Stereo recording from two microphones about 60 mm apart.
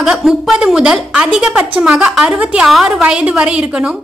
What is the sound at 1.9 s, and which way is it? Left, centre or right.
Speech, centre.